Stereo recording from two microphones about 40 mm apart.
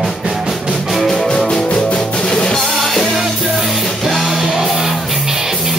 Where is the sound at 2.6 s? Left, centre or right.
Centre.